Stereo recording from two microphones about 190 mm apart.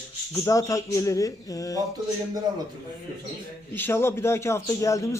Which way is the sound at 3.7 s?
10° left (ahead or behind).